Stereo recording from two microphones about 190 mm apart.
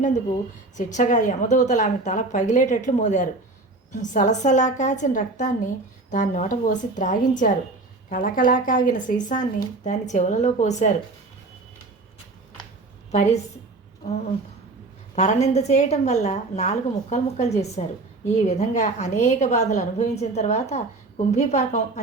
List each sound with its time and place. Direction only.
0.8 s speech: 40° left (ahead or behind)
13.1 s a woman's voice: 35° left (ahead or behind)
15.1 s speech: 35° left (ahead or behind)